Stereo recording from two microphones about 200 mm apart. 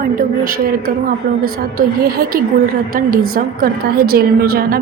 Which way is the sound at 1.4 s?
50° right (ahead or behind).